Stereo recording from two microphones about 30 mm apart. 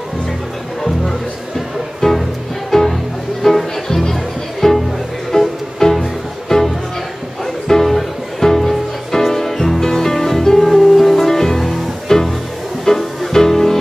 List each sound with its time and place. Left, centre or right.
2.0 s music: centre